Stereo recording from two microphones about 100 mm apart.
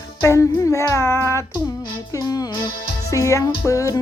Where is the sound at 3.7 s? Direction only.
35° left (ahead or behind).